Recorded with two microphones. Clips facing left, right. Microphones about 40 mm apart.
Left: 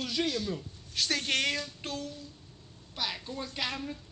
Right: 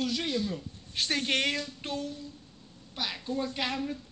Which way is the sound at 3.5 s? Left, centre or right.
Centre.